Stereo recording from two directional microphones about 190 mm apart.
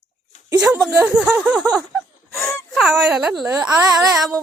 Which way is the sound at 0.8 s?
5° right (ahead or behind).